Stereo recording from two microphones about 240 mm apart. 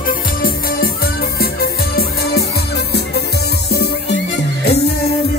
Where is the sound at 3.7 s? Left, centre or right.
Left.